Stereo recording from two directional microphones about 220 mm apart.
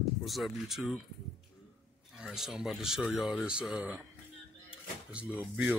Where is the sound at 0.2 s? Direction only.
Centre (ahead or behind).